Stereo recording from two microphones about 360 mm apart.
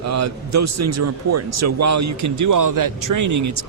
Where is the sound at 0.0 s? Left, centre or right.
Right.